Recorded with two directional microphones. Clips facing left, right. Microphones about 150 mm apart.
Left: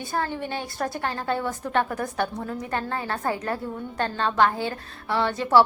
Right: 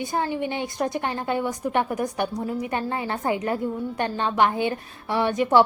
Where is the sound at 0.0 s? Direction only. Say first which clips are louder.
Right 3 dB; 20° right (ahead or behind).